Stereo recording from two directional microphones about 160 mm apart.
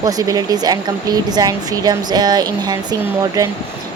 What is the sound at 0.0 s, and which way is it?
Speech, 20° right (ahead or behind).